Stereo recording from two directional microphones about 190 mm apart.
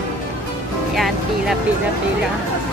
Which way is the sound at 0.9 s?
Centre (ahead or behind).